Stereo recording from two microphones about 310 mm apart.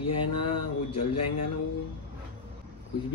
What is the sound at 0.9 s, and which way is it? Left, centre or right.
Speech, left.